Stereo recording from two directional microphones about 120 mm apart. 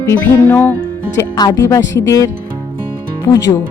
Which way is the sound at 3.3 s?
30° left (ahead or behind).